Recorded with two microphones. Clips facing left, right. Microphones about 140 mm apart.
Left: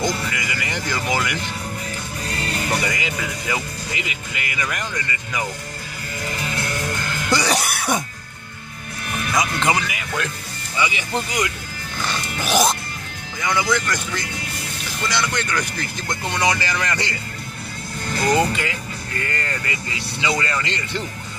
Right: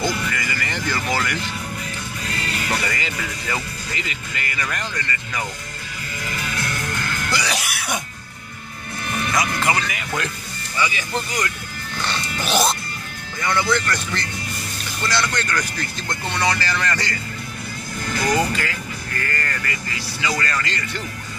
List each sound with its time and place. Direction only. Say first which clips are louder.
0.0 s speech: even; 15° left (ahead or behind)
2.2 s music: left 2 dB; 35° left (ahead or behind)
2.9 s speech: left 2 dB; 10° left (ahead or behind)
7.4 s speech: left 5 dB; 35° left (ahead or behind)
9.3 s speech: left 2 dB; 15° left (ahead or behind)
9.8 s speech: even; centre (ahead or behind)
10.8 s speech: left 1 dB; 20° left (ahead or behind)
12.0 s music: even; 5° left (ahead or behind)
13.4 s speech: even; 10° left (ahead or behind)
18.2 s speech: left 2 dB; 25° left (ahead or behind)